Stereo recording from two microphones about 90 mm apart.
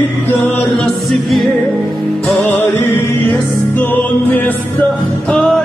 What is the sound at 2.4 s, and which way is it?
Music, 20° left (ahead or behind).